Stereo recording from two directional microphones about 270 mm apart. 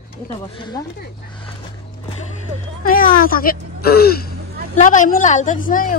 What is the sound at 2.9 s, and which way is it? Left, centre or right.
A woman's voice, left.